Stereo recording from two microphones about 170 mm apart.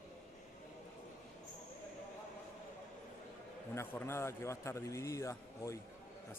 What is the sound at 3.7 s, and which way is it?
Speech, 15° left (ahead or behind).